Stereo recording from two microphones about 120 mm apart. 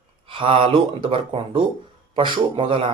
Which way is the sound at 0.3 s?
50° right (ahead or behind).